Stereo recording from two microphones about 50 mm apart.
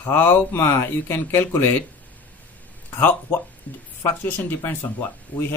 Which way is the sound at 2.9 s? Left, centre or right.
Left.